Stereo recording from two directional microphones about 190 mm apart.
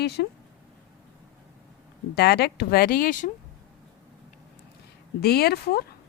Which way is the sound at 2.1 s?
60° left (ahead or behind).